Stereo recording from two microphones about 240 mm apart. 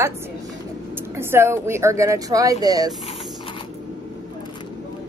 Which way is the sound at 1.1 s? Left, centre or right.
Centre.